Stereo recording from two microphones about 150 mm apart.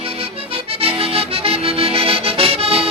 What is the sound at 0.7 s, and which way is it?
Accordion, 40° right (ahead or behind).